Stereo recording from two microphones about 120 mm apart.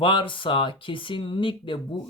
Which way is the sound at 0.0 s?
45° left (ahead or behind).